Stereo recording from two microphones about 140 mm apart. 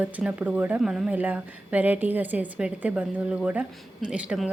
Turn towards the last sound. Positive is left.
turn(degrees=-10)  # may be behind; listen again after turning